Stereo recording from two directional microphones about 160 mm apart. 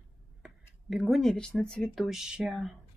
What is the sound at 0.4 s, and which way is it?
Speech, centre (ahead or behind).